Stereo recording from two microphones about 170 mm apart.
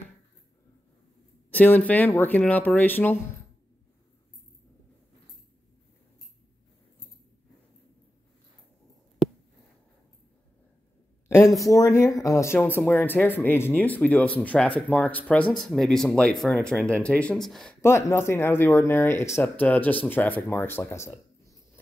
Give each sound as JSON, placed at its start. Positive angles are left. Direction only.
{"t": 1.5, "sound": "speech", "side_deg": 10}
{"t": 11.2, "sound": "speech", "side_deg": 15}
{"t": 17.8, "sound": "speech", "side_deg": 15}